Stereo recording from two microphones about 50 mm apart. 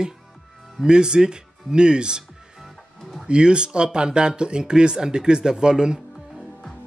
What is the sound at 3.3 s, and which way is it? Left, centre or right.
Speech, centre.